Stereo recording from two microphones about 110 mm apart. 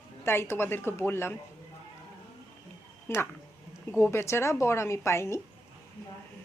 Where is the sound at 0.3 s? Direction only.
20° left (ahead or behind).